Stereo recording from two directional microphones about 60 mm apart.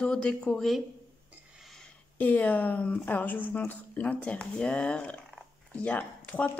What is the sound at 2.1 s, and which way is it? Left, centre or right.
Speech, left.